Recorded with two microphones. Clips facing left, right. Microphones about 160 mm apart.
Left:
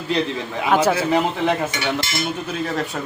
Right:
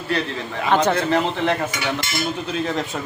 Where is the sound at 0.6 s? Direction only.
5° left (ahead or behind).